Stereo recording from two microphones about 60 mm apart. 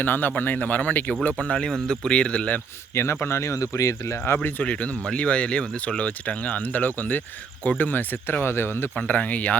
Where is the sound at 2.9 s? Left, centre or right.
Left.